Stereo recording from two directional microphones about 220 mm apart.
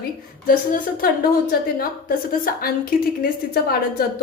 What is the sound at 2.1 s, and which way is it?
A woman's voice, 40° left (ahead or behind).